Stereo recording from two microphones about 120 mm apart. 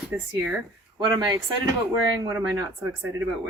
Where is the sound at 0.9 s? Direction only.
35° right (ahead or behind); by 3.2 s 20° right (ahead or behind).